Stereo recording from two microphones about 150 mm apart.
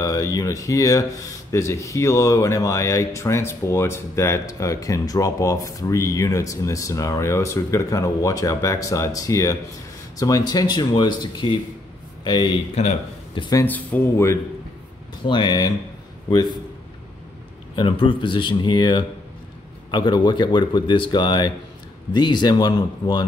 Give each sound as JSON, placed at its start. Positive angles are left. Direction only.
{"t": 0.0, "sound": "speech", "side_deg": 20}
{"t": 12.7, "sound": "speech", "side_deg": 40}
{"t": 13.6, "sound": "speech", "side_deg": 10}
{"t": 15.2, "sound": "speech", "side_deg": 30}
{"t": 17.7, "sound": "speech", "side_deg": 35}